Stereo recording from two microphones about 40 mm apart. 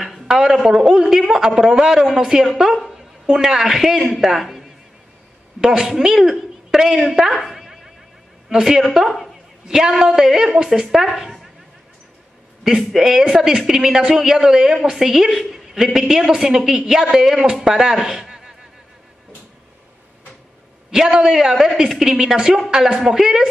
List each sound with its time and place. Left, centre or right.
0.3 s a sound: centre
0.7 s a woman's voice: centre
7.4 s dog: centre
8.5 s a woman's voice: centre
12.6 s a woman's voice: centre
20.9 s a woman's voice: centre